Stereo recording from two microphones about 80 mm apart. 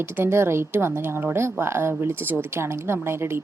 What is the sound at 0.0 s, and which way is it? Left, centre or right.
A woman's voice, right.